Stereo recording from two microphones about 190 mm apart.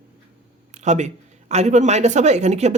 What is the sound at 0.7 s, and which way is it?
A woman's voice, 40° right (ahead or behind).